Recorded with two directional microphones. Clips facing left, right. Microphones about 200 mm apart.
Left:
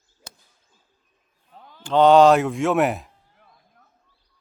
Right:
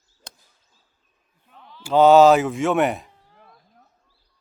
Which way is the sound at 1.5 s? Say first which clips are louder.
Even; 45° left (ahead or behind).